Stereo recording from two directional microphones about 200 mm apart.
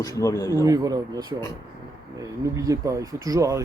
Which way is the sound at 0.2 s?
15° left (ahead or behind).